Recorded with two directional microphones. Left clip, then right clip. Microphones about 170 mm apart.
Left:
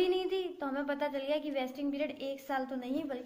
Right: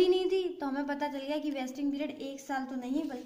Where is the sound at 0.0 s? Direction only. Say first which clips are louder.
Right 4 dB; 30° right (ahead or behind).